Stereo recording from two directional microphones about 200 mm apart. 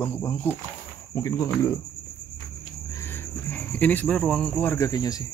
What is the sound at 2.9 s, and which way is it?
Speech, 10° left (ahead or behind).